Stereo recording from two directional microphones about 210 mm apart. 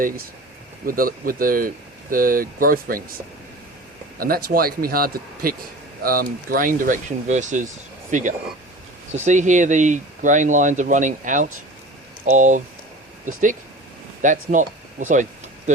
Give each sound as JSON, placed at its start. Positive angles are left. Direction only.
{"t": 0.9, "sound": "speech", "side_deg": -40}
{"t": 4.4, "sound": "speech", "side_deg": -45}